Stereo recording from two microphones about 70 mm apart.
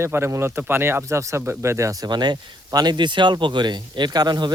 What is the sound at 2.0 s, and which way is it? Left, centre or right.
Speech, right.